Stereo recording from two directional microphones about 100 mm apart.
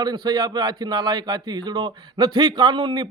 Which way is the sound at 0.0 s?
40° right (ahead or behind).